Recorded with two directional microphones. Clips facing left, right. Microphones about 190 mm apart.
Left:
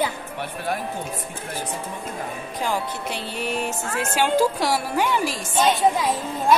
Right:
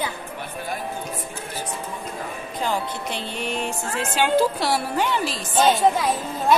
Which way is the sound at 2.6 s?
10° left (ahead or behind).